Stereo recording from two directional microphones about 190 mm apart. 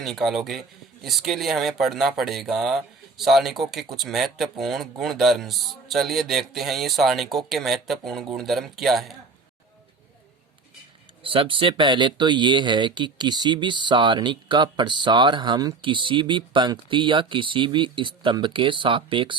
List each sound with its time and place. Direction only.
0.0 s speech: centre (ahead or behind)
11.2 s speech: 30° right (ahead or behind)